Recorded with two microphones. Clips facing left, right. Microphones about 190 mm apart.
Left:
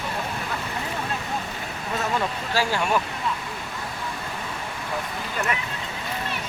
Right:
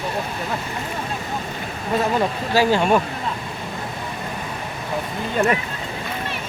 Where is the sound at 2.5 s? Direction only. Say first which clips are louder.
Right 7 dB; 25° right (ahead or behind).